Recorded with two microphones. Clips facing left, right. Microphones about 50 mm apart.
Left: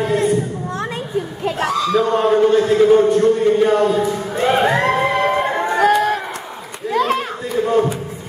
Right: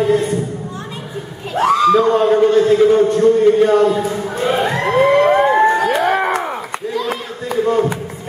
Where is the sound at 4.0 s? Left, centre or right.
Left.